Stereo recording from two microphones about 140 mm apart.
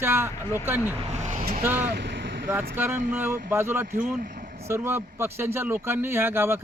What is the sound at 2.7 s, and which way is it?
Speech, 15° right (ahead or behind).